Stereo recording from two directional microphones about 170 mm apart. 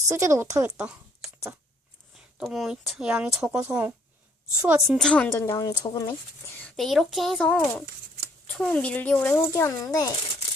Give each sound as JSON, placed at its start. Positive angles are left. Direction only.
{"t": 0.1, "sound": "speech", "side_deg": -15}
{"t": 2.4, "sound": "a woman's voice", "side_deg": 0}
{"t": 6.6, "sound": "a woman's voice", "side_deg": 5}